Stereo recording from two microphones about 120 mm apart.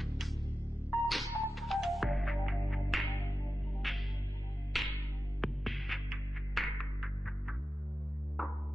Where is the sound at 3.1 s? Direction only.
20° left (ahead or behind).